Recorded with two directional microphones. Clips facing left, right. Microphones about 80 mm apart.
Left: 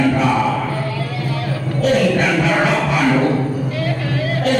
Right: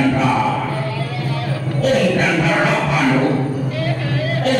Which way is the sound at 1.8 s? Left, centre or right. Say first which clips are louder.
Even; centre.